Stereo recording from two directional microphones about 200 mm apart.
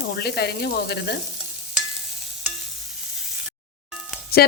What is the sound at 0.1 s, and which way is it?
Speech, 55° left (ahead or behind).